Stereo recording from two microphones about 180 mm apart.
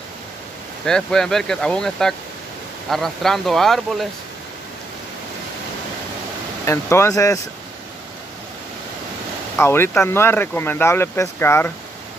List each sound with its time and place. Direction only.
0.8 s speech: 5° left (ahead or behind)
6.6 s speech: 15° left (ahead or behind)
9.6 s speech: 15° left (ahead or behind)